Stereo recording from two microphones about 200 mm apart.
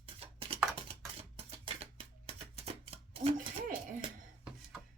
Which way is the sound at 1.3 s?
30° right (ahead or behind).